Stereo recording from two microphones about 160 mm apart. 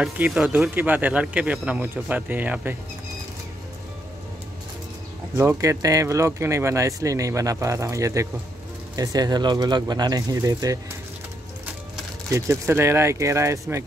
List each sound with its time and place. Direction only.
0.0 s speech: 5° right (ahead or behind)
5.3 s speech: 15° right (ahead or behind)
12.3 s speech: 15° right (ahead or behind)